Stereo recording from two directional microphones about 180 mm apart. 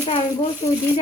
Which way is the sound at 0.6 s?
35° left (ahead or behind).